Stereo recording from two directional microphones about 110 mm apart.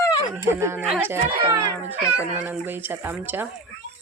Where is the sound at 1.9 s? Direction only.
10° right (ahead or behind).